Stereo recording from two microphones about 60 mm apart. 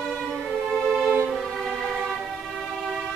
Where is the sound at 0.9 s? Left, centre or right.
Centre.